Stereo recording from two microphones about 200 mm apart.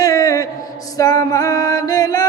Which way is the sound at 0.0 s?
15° left (ahead or behind).